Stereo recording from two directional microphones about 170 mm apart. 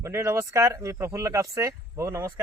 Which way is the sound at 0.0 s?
15° right (ahead or behind).